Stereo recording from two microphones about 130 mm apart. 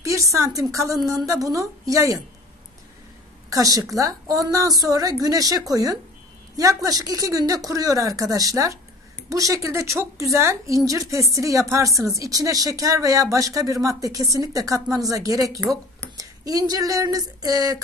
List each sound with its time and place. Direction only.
0.0 s speech: 25° right (ahead or behind)
3.4 s speech: 25° right (ahead or behind)